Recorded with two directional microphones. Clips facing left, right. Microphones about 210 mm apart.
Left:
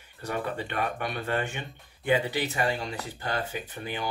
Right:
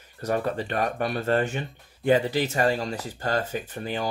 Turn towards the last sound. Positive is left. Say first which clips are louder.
# right 5 dB
turn(degrees=-40)  # may be behind; listen again after turning